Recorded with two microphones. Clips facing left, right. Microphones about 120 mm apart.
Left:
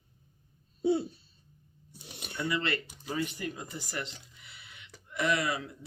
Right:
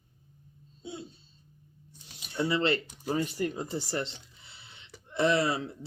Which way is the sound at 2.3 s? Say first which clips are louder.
Right 5 dB; 30° right (ahead or behind).